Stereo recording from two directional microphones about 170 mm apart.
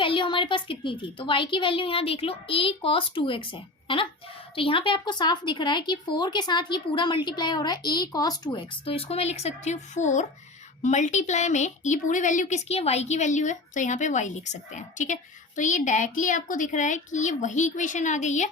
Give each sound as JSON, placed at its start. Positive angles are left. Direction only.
{"t": 0.0, "sound": "a woman's voice", "side_deg": 30}